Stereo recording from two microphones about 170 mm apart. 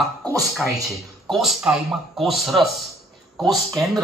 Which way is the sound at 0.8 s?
Centre (ahead or behind).